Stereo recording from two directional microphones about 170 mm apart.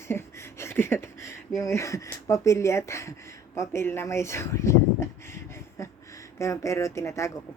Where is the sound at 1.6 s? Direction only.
15° left (ahead or behind).